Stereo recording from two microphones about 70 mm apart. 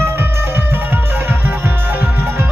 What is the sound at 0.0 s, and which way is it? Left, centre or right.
Music, right.